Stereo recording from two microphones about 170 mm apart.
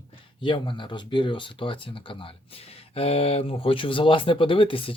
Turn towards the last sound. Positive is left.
turn(degrees=30)  # may be behind; listen again after turning